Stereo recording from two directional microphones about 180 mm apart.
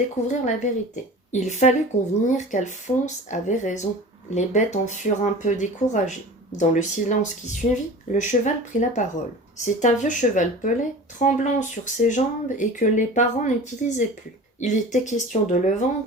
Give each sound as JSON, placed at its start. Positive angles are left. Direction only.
{"t": 0.3, "sound": "speech", "side_deg": 40}